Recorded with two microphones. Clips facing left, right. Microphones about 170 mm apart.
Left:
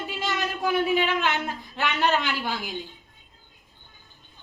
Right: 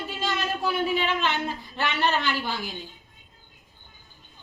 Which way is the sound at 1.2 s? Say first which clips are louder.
Even; 15° left (ahead or behind).